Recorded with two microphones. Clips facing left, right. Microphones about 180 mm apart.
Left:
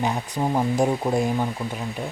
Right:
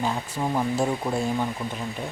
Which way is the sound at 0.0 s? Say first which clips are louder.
Left 2 dB; 15° left (ahead or behind).